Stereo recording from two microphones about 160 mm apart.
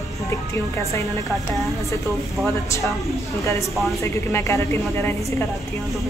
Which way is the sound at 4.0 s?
20° left (ahead or behind).